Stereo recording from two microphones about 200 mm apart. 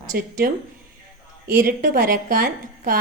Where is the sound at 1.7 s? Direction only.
45° right (ahead or behind).